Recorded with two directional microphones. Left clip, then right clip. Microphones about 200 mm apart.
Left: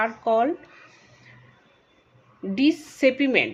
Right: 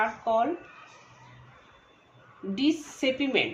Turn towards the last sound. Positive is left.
turn(degrees=45)  # may be behind; listen again after turning